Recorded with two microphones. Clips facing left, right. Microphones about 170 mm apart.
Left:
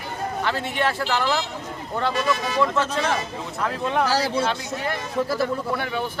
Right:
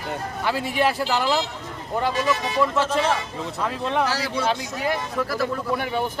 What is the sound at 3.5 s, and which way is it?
Speech, centre (ahead or behind).